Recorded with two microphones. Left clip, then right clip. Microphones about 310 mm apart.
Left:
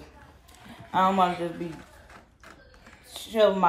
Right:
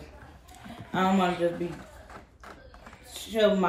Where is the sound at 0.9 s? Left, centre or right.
Centre.